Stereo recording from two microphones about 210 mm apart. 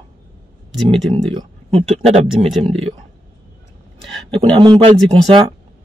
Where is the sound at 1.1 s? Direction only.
25° right (ahead or behind).